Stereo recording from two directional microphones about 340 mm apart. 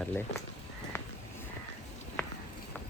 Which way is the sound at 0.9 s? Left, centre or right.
Centre.